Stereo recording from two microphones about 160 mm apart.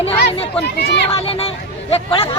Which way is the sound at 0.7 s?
90° left.